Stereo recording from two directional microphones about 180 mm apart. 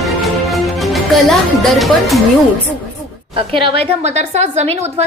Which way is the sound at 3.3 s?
30° right (ahead or behind).